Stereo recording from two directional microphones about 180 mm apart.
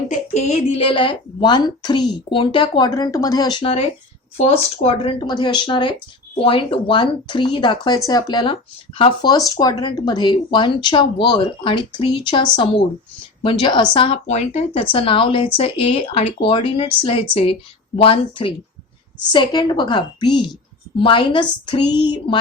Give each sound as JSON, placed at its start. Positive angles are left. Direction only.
{"t": 0.1, "sound": "a woman's voice", "side_deg": 35}